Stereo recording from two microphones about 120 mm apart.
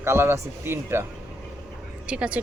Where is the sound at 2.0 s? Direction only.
10° right (ahead or behind).